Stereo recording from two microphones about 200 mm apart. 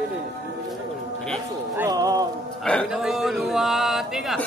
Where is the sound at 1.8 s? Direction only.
20° right (ahead or behind).